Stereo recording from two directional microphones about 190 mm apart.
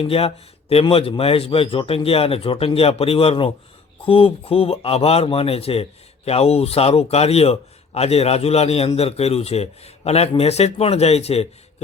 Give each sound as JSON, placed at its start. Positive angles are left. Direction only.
{"t": 0.0, "sound": "a man's voice", "side_deg": 30}